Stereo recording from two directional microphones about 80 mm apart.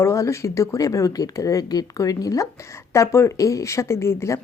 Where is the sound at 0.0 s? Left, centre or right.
Left.